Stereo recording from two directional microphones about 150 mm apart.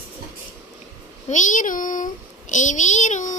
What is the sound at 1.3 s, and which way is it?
A child's voice, 55° left (ahead or behind).